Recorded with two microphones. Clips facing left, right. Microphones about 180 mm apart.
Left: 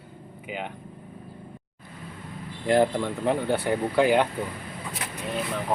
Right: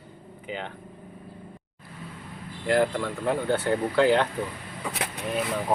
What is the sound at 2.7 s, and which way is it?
Speech, 20° left (ahead or behind).